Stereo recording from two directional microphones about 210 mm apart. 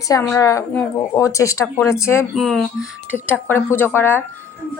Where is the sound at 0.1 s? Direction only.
15° left (ahead or behind).